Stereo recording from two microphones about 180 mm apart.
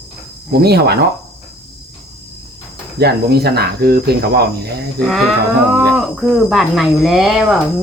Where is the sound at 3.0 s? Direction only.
60° right (ahead or behind).